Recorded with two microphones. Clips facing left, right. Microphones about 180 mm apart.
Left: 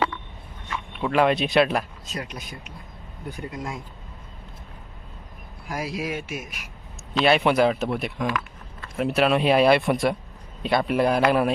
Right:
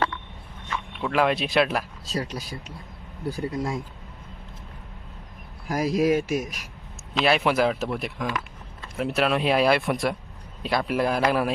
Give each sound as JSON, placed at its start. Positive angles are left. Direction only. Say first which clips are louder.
{"t": 0.7, "sound": "speech", "louder": "left 2 dB", "side_deg": 5}
{"t": 2.0, "sound": "speech", "louder": "right 4 dB", "side_deg": -35}
{"t": 5.6, "sound": "speech", "louder": "right 8 dB", "side_deg": -40}
{"t": 7.1, "sound": "a man's voice", "louder": "left 2 dB", "side_deg": 0}